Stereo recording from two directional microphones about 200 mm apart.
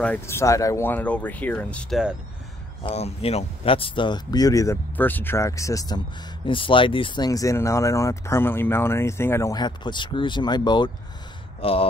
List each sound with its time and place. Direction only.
0.0 s speech: 10° left (ahead or behind)
2.8 s speech: 30° left (ahead or behind)